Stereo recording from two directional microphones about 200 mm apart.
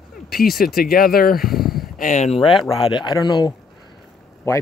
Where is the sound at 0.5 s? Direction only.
50° left (ahead or behind).